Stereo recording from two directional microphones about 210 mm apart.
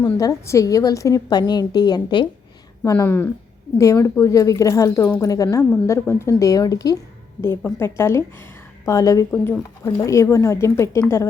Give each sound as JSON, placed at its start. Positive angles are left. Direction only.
{"t": 0.0, "sound": "speech", "side_deg": 15}